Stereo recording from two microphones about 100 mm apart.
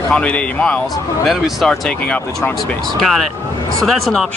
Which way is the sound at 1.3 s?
Centre (ahead or behind).